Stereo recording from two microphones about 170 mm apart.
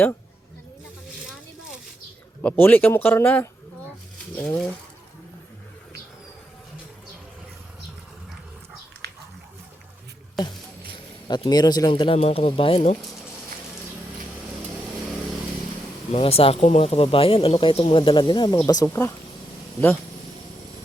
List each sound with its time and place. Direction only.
2.4 s speech: 10° left (ahead or behind)
9.0 s a sound: 75° right (ahead or behind)
10.9 s speech: 25° left (ahead or behind)
16.1 s speech: 35° left (ahead or behind)